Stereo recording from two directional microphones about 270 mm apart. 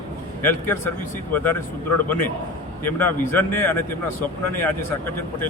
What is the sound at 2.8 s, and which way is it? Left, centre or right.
A man's voice, centre.